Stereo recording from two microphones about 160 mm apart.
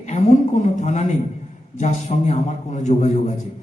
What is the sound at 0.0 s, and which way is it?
Speech, 45° left (ahead or behind).